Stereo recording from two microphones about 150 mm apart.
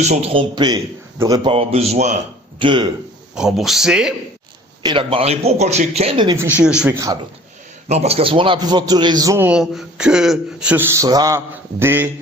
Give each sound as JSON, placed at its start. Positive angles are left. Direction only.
{"t": 0.0, "sound": "a man's voice", "side_deg": -45}
{"t": 1.5, "sound": "a man's voice", "side_deg": -40}
{"t": 2.6, "sound": "a man's voice", "side_deg": -35}
{"t": 3.3, "sound": "speech", "side_deg": 0}
{"t": 4.8, "sound": "a man's voice", "side_deg": -30}
{"t": 6.2, "sound": "a man's voice", "side_deg": -20}
{"t": 6.6, "sound": "a man's voice", "side_deg": -5}
{"t": 7.9, "sound": "a man's voice", "side_deg": -45}
{"t": 9.5, "sound": "a man's voice", "side_deg": -5}